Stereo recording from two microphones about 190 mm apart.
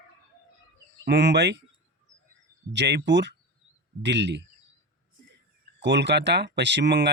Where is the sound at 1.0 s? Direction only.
65° right (ahead or behind).